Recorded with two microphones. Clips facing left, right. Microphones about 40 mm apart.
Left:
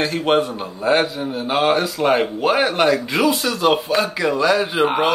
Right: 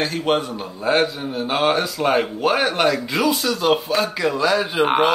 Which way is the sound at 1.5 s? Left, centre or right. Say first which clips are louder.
Left 2 dB; centre.